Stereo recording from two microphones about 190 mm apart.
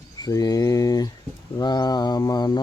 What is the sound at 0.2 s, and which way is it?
Mantra, 20° left (ahead or behind).